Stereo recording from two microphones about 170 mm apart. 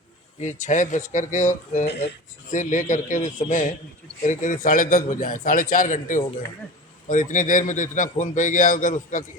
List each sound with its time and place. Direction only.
0.3 s a man's voice: 45° left (ahead or behind)